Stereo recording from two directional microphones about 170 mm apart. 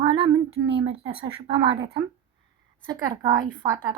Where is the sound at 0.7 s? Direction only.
30° right (ahead or behind).